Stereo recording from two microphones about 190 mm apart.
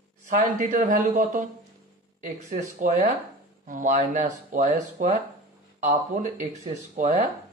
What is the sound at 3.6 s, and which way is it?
Speech, 45° right (ahead or behind).